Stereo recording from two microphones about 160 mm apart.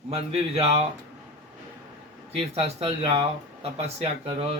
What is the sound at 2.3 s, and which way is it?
Speech, 40° right (ahead or behind).